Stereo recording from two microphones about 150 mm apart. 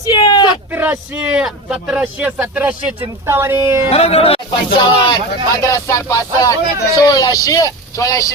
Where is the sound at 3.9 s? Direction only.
40° left (ahead or behind).